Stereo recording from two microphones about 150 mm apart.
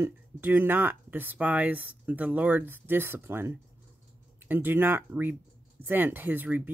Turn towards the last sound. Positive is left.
turn(degrees=-10)  # may be behind; listen again after turning